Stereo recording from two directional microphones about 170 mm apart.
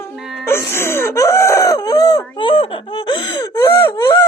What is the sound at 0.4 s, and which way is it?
Speech, 15° left (ahead or behind).